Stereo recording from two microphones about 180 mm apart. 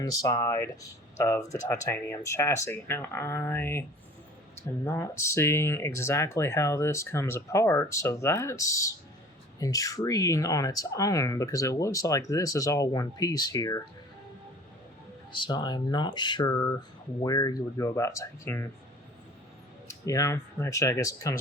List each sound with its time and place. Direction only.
0.0 s speech: 20° left (ahead or behind)
15.3 s speech: 25° left (ahead or behind)
19.9 s speech: 15° left (ahead or behind)